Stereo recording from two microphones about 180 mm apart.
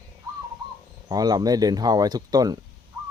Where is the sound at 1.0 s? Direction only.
20° right (ahead or behind).